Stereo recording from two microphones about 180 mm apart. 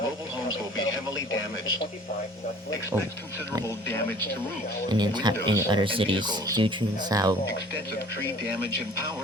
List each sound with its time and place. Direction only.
4.9 s speech: 25° right (ahead or behind)